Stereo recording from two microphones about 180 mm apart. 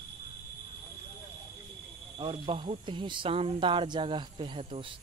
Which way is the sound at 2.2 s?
30° right (ahead or behind).